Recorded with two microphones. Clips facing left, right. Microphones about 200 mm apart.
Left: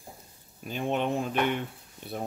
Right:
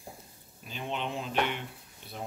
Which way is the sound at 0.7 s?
50° left (ahead or behind).